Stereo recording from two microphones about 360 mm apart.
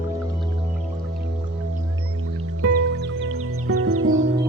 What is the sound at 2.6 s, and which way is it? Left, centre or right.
Music, right.